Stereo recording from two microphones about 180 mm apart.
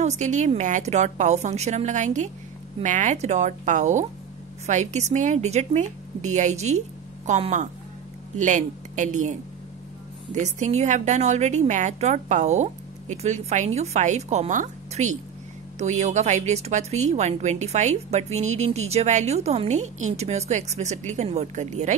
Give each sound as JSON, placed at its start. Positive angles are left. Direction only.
{"t": 0.0, "sound": "a woman's voice", "side_deg": -40}